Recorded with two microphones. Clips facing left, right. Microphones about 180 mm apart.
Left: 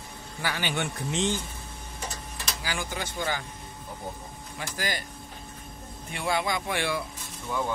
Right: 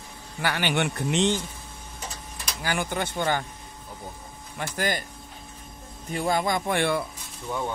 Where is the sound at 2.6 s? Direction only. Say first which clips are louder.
Right 7 dB; 60° right (ahead or behind).